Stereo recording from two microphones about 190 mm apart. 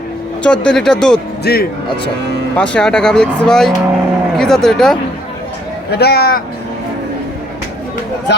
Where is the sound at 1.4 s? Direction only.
55° left (ahead or behind).